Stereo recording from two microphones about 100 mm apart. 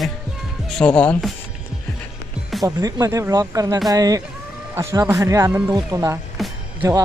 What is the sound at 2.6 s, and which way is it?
Speech, 40° right (ahead or behind).